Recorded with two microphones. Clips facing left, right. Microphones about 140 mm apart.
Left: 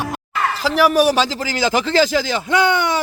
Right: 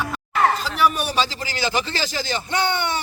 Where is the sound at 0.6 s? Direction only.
90° left.